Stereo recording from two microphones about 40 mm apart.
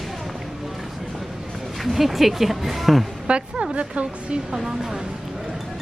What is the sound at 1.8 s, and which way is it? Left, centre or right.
Speech, centre.